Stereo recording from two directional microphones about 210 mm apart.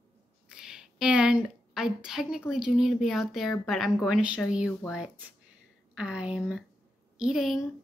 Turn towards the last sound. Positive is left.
turn(degrees=0)  # may be behind; listen again after turning